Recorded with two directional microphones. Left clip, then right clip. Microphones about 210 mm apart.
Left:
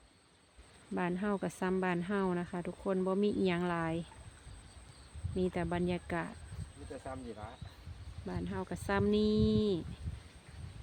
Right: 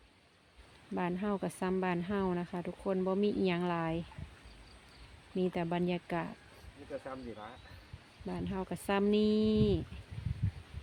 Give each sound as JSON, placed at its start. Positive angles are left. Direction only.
{"t": 0.9, "sound": "speech", "side_deg": 5}
{"t": 5.4, "sound": "speech", "side_deg": 0}
{"t": 7.1, "sound": "speech", "side_deg": 50}
{"t": 8.3, "sound": "speech", "side_deg": -5}